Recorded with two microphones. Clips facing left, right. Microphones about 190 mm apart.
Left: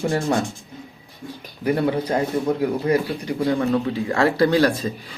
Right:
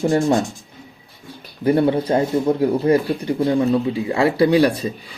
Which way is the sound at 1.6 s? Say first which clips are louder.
Right 4 dB; 30° right (ahead or behind).